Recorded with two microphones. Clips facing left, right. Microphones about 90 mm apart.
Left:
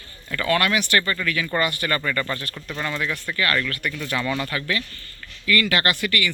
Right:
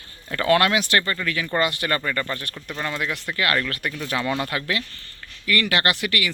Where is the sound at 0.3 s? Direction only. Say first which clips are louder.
Right 3 dB; 35° right (ahead or behind).